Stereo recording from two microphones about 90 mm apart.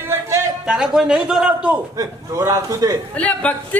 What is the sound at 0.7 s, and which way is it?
A man's voice, 5° right (ahead or behind).